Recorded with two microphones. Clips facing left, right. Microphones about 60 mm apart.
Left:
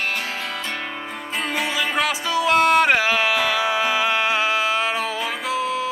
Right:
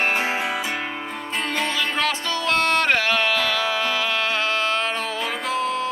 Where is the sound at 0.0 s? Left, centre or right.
Right.